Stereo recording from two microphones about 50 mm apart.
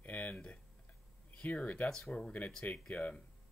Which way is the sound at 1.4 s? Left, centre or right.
Left.